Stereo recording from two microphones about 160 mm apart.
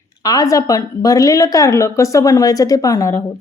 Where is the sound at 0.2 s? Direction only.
25° left (ahead or behind).